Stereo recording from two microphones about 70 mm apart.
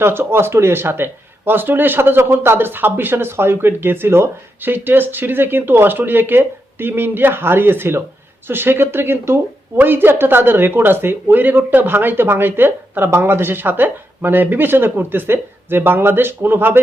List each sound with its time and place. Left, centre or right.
0.0 s speech: right